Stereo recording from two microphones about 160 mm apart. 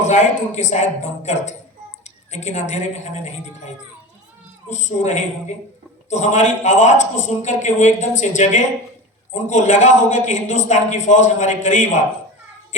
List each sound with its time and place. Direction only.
0.0 s a man's voice: 50° left (ahead or behind)
4.7 s a man's voice: 50° left (ahead or behind)